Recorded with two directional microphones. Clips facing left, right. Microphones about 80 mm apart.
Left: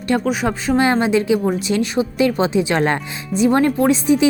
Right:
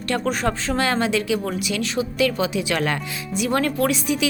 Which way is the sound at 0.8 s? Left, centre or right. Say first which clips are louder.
Left 7 dB; left.